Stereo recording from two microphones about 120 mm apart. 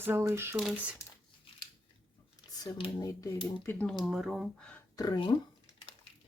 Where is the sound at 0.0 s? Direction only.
20° right (ahead or behind).